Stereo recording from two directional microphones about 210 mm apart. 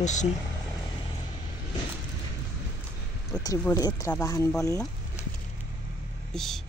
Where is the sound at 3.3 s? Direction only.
15° left (ahead or behind).